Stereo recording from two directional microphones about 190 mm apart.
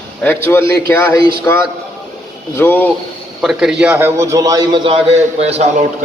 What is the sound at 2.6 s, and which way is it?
Speech, 10° left (ahead or behind).